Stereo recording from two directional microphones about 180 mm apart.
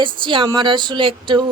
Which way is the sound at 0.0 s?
25° right (ahead or behind).